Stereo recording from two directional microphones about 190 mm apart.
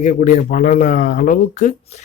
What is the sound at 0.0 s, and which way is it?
Speech, 40° left (ahead or behind).